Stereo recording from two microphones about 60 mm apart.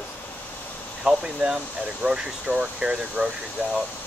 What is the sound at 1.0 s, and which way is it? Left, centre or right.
Speech, centre.